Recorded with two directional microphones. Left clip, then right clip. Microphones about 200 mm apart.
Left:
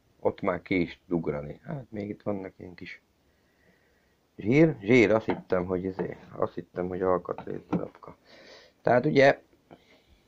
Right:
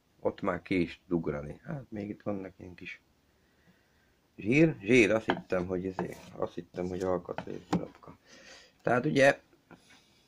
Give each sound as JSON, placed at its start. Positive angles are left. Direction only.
{"t": 0.2, "sound": "speech", "side_deg": -15}
{"t": 4.4, "sound": "speech", "side_deg": -5}